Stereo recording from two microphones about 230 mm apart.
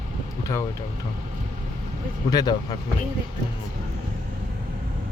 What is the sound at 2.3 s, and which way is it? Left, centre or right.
Speech, centre.